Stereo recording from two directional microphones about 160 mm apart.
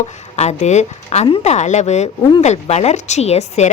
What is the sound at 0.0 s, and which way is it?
Speech, 45° left (ahead or behind).